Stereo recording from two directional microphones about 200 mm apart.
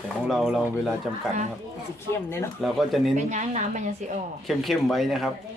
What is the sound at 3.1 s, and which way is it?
Speech, 35° right (ahead or behind).